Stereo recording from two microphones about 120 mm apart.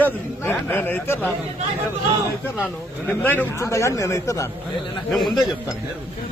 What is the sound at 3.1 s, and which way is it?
A man's voice, 15° left (ahead or behind).